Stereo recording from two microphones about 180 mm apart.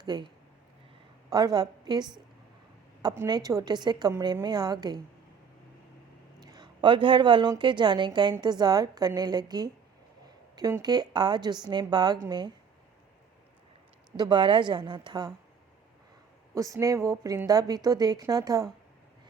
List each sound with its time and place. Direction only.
0.0 s speech: 20° right (ahead or behind)
1.3 s a woman's voice: 20° right (ahead or behind)
6.4 s a woman's voice: 20° right (ahead or behind)
14.2 s a woman's voice: 25° right (ahead or behind)
16.6 s a woman's voice: 20° right (ahead or behind)